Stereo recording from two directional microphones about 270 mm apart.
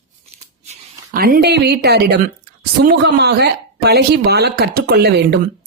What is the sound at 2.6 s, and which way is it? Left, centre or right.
A woman's voice, right.